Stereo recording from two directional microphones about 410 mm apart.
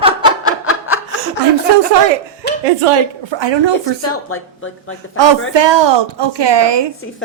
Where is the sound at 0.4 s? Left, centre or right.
Left.